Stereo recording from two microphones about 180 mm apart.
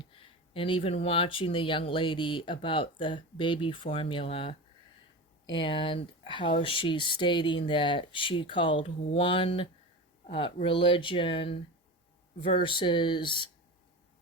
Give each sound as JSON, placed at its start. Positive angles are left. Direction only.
{"t": 0.0, "sound": "speech", "side_deg": 30}